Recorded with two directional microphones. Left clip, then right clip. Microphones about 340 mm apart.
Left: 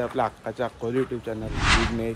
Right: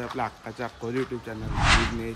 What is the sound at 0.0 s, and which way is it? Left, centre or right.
Speech, centre.